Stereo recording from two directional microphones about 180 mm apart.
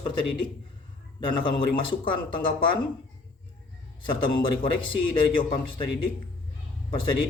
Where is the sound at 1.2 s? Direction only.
25° left (ahead or behind).